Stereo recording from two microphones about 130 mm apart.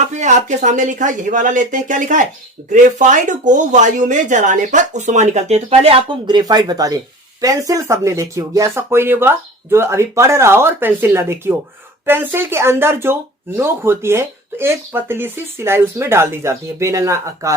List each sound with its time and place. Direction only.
0.1 s speech: 65° right (ahead or behind); by 6.0 s 50° right (ahead or behind)
6.2 s speech: 30° right (ahead or behind)